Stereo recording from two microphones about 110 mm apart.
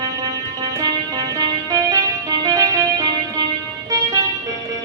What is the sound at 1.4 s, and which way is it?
Music, 35° right (ahead or behind).